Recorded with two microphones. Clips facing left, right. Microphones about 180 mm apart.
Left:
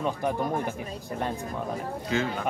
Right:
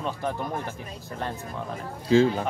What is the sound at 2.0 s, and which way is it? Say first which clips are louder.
Speech: right 10 dB; 30° right (ahead or behind).